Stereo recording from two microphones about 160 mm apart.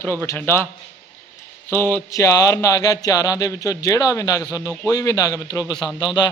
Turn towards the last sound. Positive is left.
turn(degrees=25)  # may be behind; listen again after turning